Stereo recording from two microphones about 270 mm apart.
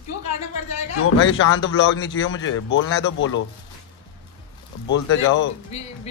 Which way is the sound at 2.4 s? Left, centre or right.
Left.